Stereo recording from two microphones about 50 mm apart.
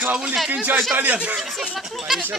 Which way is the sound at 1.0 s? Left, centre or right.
Right.